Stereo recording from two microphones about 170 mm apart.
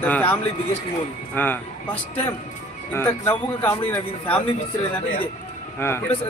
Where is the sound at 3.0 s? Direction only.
15° left (ahead or behind).